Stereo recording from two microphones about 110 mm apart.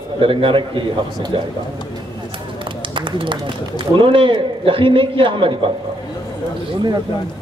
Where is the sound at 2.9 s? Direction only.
50° right (ahead or behind).